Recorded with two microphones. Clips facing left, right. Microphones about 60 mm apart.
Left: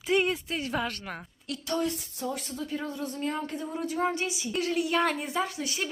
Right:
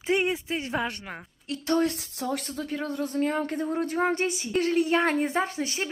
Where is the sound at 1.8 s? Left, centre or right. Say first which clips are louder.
Right 3 dB; right.